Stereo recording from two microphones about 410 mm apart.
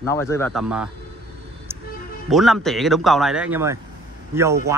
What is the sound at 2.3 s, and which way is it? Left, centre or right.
Speech, centre.